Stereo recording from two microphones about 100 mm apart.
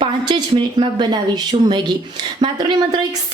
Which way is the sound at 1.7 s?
50° right (ahead or behind).